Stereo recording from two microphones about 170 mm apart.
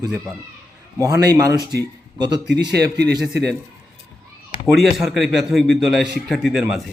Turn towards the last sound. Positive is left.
turn(degrees=0)  # may be behind; listen again after turning